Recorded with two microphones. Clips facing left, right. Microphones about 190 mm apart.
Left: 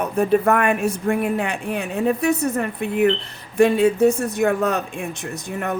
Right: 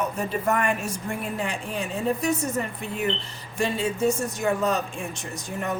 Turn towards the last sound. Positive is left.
turn(degrees=60)  # may be behind; listen again after turning